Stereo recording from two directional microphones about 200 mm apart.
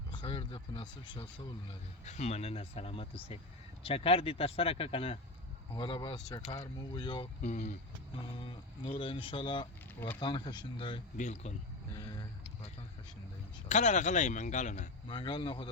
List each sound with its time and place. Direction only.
0.1 s speech: 25° left (ahead or behind)
2.0 s speech: 35° left (ahead or behind)
7.4 s speech: 40° left (ahead or behind)
8.2 s speech: 25° left (ahead or behind)
11.2 s speech: 35° left (ahead or behind)
11.9 s speech: 20° left (ahead or behind)
13.7 s speech: 35° left (ahead or behind)
15.1 s speech: 25° left (ahead or behind)